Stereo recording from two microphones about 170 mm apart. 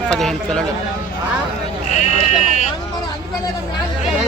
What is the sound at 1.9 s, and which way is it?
Sheep, 40° left (ahead or behind).